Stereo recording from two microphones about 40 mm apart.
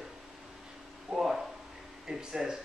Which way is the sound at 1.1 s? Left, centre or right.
Centre.